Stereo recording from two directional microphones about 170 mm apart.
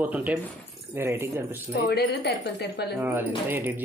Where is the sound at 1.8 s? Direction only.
75° left (ahead or behind).